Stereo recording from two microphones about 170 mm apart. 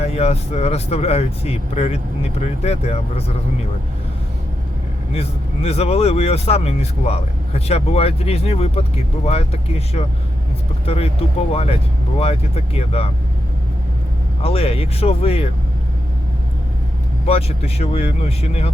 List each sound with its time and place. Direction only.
0.0 s speech: 35° left (ahead or behind)
5.1 s speech: 35° left (ahead or behind)
14.4 s speech: 35° left (ahead or behind)
17.2 s speech: 35° left (ahead or behind)